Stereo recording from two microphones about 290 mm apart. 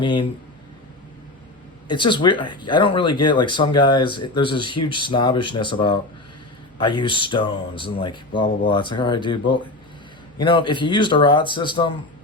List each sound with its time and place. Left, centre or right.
0.0 s speech: centre
1.9 s speech: centre